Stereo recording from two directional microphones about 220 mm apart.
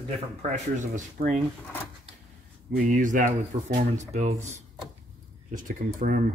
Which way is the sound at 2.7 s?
35° right (ahead or behind).